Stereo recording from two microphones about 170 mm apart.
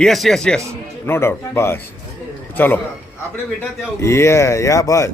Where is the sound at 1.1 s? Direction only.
15° left (ahead or behind).